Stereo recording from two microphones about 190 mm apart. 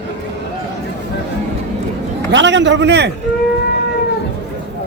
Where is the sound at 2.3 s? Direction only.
70° right (ahead or behind).